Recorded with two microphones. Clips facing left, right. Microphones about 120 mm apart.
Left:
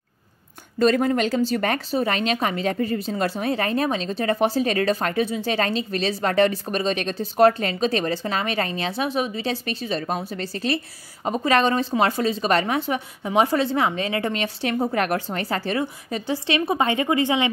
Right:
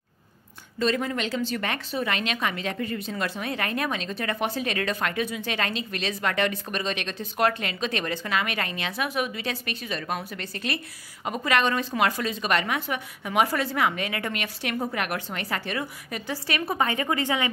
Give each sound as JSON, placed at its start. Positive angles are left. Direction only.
{"t": 0.7, "sound": "a woman's voice", "side_deg": 45}